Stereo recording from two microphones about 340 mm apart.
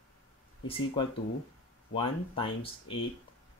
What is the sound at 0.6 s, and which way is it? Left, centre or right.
Speech, centre.